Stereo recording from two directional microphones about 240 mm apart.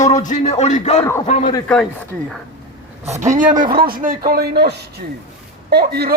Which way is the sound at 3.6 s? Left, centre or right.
Right.